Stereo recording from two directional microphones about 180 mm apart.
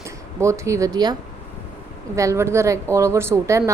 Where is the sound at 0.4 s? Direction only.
15° right (ahead or behind).